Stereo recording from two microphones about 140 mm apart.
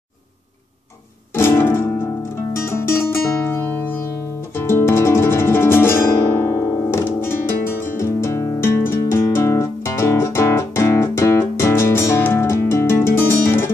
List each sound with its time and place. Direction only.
1.3 s music: 20° left (ahead or behind)
4.6 s guitar: 20° left (ahead or behind)